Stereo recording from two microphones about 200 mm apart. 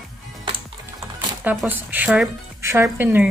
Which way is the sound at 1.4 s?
5° right (ahead or behind).